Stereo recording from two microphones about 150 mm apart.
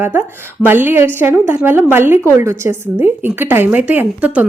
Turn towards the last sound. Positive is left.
turn(degrees=-10)  # may be behind; listen again after turning